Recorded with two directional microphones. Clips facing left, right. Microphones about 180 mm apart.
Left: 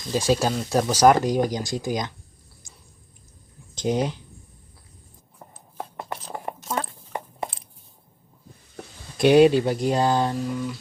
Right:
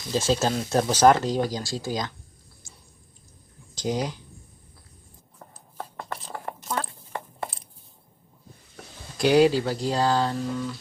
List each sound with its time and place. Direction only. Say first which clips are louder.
0.1 s speech: left 2 dB; 15° left (ahead or behind)
3.8 s speech: left 4 dB; 20° left (ahead or behind)
6.5 s a sound: left 2 dB; 15° left (ahead or behind)
9.1 s speech: left 4 dB; 25° left (ahead or behind)